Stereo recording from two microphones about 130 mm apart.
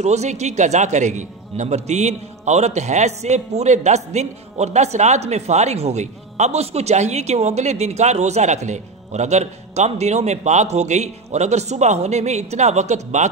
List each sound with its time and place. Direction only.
0.0 s a man's voice: 60° right (ahead or behind)